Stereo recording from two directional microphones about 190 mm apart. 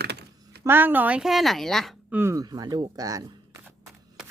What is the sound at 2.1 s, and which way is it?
Speech, 15° right (ahead or behind).